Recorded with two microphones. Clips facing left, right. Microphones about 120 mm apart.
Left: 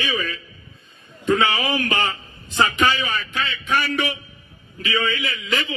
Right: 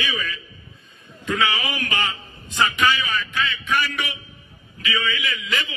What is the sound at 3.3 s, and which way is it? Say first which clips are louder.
Speech: left 1 dB; 30° left (ahead or behind).